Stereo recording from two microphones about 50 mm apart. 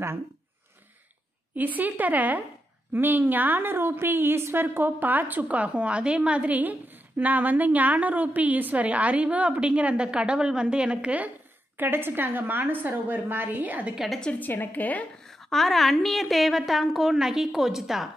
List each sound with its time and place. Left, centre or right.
1.5 s a woman's voice: right
13.9 s a woman's voice: centre
14.4 s a woman's voice: left
15.5 s a woman's voice: centre